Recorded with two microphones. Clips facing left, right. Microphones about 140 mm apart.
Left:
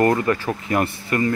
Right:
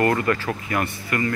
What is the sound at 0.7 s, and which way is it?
Speech, 30° left (ahead or behind).